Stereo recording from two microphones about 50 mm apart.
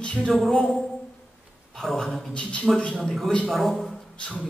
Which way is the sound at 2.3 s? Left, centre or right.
Left.